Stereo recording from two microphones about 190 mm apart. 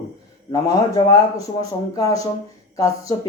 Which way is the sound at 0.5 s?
20° left (ahead or behind).